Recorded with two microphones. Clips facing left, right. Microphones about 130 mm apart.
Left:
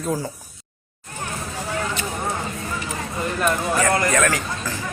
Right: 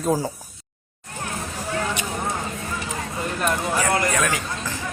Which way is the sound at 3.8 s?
10° right (ahead or behind).